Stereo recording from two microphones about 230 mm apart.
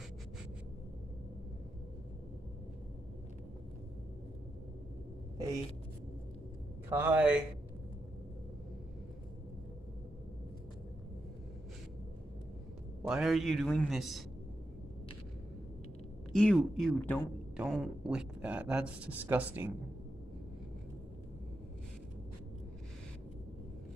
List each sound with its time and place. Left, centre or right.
6.9 s speech: centre
13.1 s speech: centre
16.3 s speech: centre
17.6 s speech: centre